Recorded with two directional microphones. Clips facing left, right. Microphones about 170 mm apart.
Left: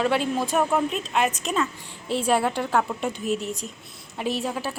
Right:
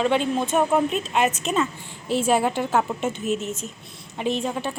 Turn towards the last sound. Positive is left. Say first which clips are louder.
# right 2 dB
turn(degrees=5)  # may be behind; listen again after turning